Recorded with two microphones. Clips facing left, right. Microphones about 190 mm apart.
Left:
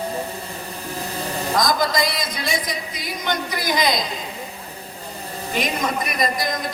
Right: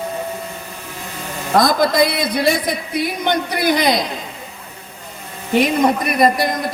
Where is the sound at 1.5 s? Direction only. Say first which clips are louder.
Right 7 dB; 60° right (ahead or behind).